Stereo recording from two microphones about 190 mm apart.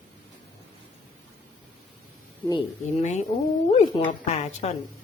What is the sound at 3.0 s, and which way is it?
Speech, 35° left (ahead or behind).